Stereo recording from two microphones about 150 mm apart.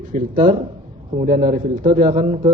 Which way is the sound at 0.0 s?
65° right (ahead or behind).